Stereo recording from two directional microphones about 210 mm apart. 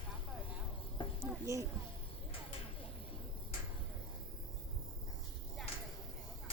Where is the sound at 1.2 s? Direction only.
15° right (ahead or behind).